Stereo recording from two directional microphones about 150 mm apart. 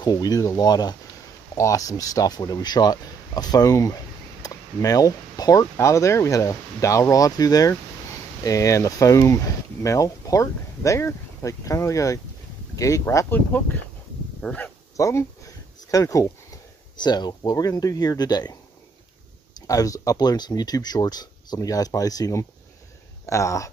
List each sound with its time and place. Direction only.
0.0 s speech: 25° left (ahead or behind); by 14.7 s 10° left (ahead or behind)
15.0 s speech: 20° left (ahead or behind)
19.6 s speech: 25° left (ahead or behind)